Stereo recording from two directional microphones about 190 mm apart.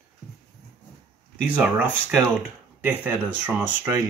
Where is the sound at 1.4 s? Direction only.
5° right (ahead or behind).